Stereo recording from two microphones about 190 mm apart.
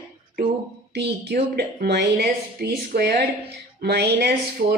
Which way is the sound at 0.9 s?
60° right (ahead or behind).